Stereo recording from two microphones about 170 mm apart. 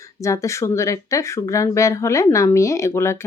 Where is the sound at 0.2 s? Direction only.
20° left (ahead or behind).